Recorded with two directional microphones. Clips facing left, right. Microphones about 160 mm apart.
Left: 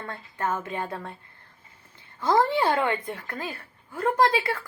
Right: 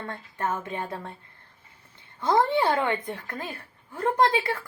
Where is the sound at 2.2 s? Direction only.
20° right (ahead or behind).